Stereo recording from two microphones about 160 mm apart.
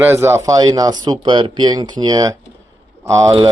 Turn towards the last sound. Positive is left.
turn(degrees=-20)  # may be behind; listen again after turning